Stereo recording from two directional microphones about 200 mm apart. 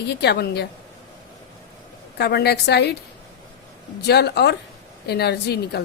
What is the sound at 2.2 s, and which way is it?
Speech, 55° left (ahead or behind).